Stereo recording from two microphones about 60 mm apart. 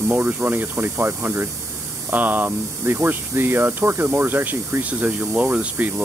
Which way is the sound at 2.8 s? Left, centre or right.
Right.